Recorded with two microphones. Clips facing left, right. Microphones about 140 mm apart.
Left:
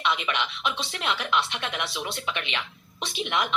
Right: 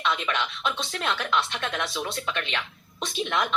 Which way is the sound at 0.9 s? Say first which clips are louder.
Right 1 dB; 55° right (ahead or behind).